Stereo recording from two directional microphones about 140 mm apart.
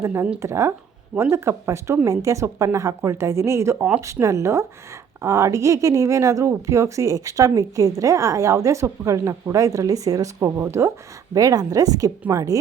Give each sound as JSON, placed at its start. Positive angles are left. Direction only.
{"t": 0.0, "sound": "speech", "side_deg": -20}